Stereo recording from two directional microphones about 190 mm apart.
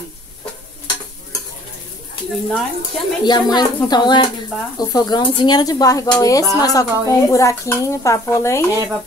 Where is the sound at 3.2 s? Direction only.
20° left (ahead or behind).